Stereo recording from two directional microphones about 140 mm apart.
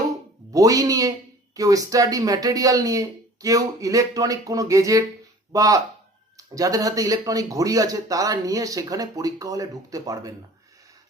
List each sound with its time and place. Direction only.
0.5 s speech: 25° right (ahead or behind)